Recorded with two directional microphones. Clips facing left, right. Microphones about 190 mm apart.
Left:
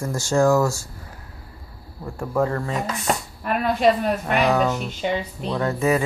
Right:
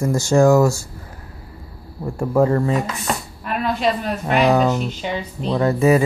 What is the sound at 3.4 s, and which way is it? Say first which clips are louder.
Speech: left 2 dB; 50° left (ahead or behind).